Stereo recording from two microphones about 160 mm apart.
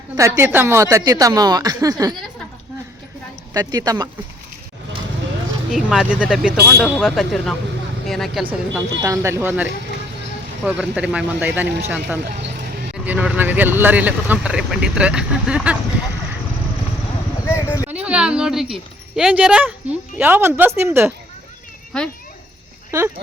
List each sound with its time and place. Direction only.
0.2 s a woman's voice: 15° right (ahead or behind)
3.5 s a woman's voice: 25° right (ahead or behind)
5.7 s speech: 5° right (ahead or behind)
9.0 s speech: 20° right (ahead or behind)
17.4 s a sound: 15° left (ahead or behind)
17.8 s speech: 10° right (ahead or behind)
21.9 s speech: 5° left (ahead or behind)
22.9 s speech: 15° right (ahead or behind)